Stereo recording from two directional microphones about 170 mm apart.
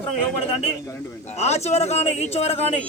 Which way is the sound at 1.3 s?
40° left (ahead or behind).